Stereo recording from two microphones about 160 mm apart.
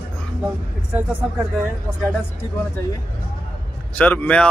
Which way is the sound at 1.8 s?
5° left (ahead or behind).